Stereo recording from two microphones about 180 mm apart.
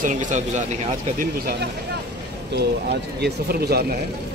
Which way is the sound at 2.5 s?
65° right (ahead or behind).